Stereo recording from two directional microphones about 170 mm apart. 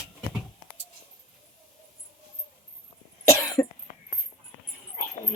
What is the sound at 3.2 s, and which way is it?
Cough, 20° left (ahead or behind).